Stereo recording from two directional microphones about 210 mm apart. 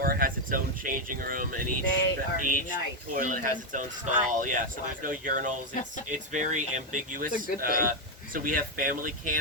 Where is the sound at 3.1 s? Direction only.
40° right (ahead or behind).